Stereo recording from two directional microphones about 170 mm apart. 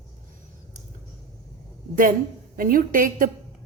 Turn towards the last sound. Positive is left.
turn(degrees=-50)  # may be behind; listen again after turning